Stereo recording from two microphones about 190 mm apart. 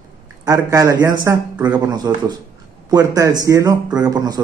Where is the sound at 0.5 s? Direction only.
20° right (ahead or behind).